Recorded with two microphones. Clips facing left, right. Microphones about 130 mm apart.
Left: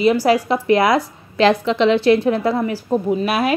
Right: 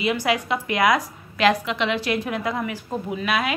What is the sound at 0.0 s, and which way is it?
A woman's voice, 35° left (ahead or behind).